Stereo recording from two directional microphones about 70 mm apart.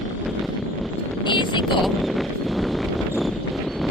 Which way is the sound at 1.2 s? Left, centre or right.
Left.